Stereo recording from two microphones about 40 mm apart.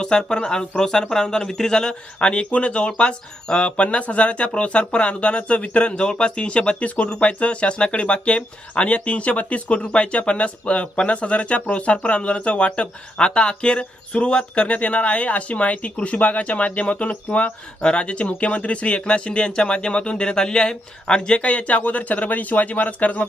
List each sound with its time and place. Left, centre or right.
0.0 s speech: left
2.3 s speech: left
6.0 s speech: left